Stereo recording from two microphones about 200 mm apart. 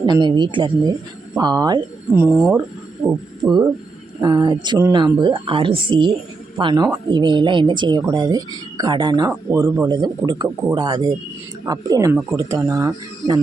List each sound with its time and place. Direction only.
0.0 s speech: 20° right (ahead or behind)
3.4 s speech: 20° right (ahead or behind)